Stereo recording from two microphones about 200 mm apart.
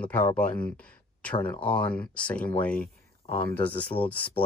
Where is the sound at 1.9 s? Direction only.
5° left (ahead or behind).